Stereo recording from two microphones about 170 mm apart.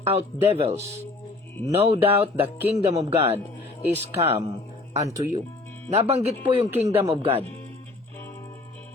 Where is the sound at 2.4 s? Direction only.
10° right (ahead or behind).